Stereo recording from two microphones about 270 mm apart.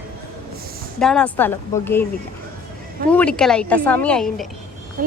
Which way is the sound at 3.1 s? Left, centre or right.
Centre.